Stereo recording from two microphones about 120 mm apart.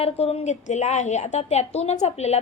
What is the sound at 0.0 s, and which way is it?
A woman's voice, 55° left (ahead or behind).